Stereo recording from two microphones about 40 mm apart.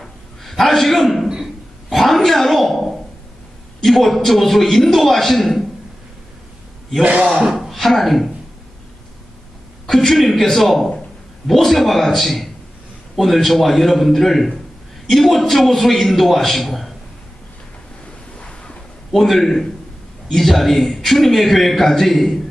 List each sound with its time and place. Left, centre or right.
0.0 s a sound: centre
3.8 s a man's voice: centre
7.0 s a man's voice: right
7.6 s speech: centre
9.8 s a man's voice: centre
18.3 s waves: left
19.1 s a man's voice: centre